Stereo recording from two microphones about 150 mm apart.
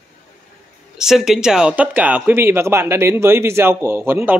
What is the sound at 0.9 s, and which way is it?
Speech, 5° right (ahead or behind).